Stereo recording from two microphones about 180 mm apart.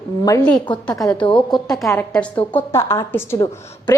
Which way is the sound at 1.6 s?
Centre (ahead or behind).